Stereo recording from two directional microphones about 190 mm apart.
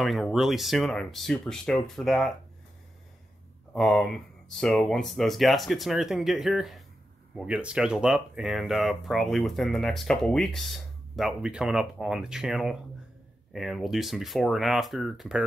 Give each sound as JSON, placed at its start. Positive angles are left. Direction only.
{"t": 0.0, "sound": "speech", "side_deg": 0}
{"t": 3.7, "sound": "speech", "side_deg": 0}